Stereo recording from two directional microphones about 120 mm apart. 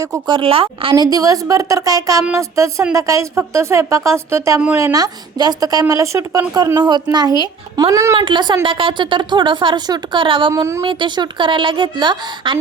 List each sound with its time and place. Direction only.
0.0 s a woman's voice: 30° right (ahead or behind)
0.3 s speech: 50° right (ahead or behind)
0.9 s a woman's voice: 30° right (ahead or behind)
6.7 s a woman's voice: 35° right (ahead or behind)
8.1 s speech: 45° right (ahead or behind)
10.5 s a woman's voice: 25° right (ahead or behind)
10.8 s speech: 40° right (ahead or behind)